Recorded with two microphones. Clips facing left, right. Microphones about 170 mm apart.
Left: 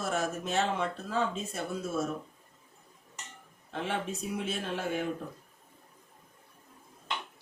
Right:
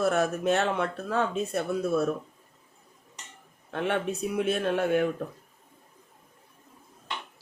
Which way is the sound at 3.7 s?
60° right (ahead or behind).